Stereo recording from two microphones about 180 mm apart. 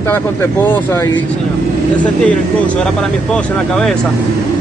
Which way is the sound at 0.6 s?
15° left (ahead or behind).